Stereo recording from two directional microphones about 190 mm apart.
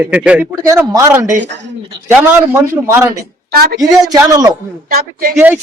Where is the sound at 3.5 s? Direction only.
50° right (ahead or behind).